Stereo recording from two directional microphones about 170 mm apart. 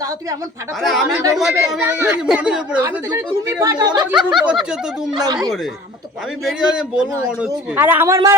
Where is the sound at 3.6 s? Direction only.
20° right (ahead or behind).